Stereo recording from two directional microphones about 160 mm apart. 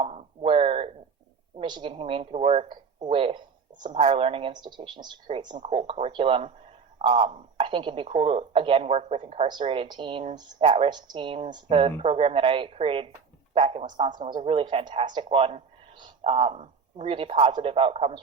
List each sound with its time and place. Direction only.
0.0 s a sound: 35° right (ahead or behind)
1.5 s speech: 30° right (ahead or behind)
13.8 s speech: 30° right (ahead or behind)